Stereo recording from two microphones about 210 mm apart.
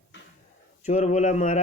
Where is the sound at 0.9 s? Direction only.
35° left (ahead or behind).